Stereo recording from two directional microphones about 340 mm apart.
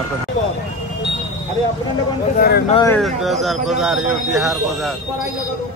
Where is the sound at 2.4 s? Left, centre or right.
Left.